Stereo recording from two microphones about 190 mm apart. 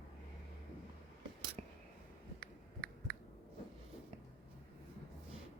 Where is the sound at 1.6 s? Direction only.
35° right (ahead or behind).